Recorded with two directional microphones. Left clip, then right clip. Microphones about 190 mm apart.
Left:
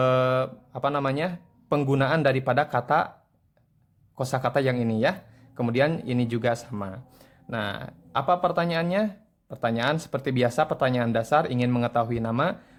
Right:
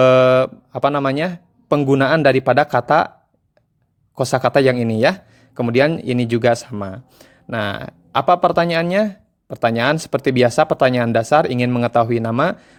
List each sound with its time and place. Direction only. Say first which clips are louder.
0.0 s speech: right 11 dB; 40° right (ahead or behind)
4.1 s speech: right 10 dB; 40° right (ahead or behind)